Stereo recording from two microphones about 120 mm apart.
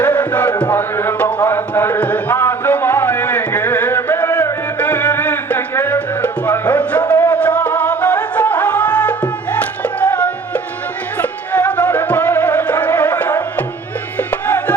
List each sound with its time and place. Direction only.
0.0 s chant: 15° left (ahead or behind)
0.6 s music: 20° left (ahead or behind)